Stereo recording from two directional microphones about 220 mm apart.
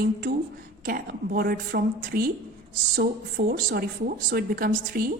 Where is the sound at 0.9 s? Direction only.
40° right (ahead or behind).